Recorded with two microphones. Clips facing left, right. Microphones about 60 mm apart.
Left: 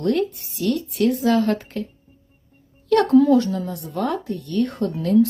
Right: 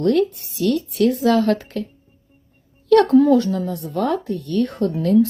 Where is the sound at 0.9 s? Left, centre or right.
Right.